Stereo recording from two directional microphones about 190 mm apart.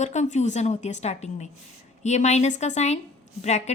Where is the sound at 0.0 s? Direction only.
40° left (ahead or behind).